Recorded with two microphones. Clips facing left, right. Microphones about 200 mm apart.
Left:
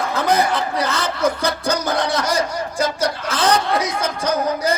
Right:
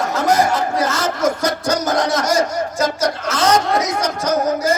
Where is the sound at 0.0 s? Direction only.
45° right (ahead or behind).